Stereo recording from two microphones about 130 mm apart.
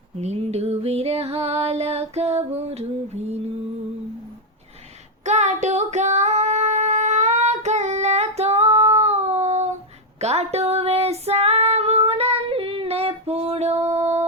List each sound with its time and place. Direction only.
0.2 s music: 55° right (ahead or behind)
5.2 s female singing: 60° right (ahead or behind)